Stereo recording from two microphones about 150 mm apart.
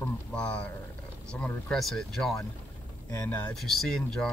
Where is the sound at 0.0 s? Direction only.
10° left (ahead or behind).